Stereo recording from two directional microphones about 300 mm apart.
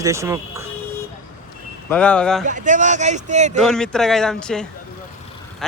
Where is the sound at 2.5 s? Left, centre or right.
Right.